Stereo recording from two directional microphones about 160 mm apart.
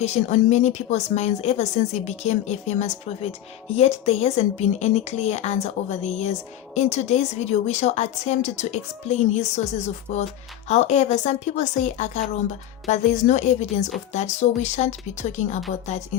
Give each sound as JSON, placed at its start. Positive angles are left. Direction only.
{"t": 0.0, "sound": "a woman's voice", "side_deg": 45}